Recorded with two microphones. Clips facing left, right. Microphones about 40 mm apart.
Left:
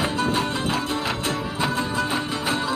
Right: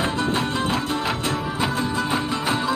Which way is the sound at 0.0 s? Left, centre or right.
Centre.